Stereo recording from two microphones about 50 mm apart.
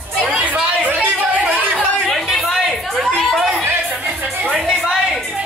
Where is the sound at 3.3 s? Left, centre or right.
Centre.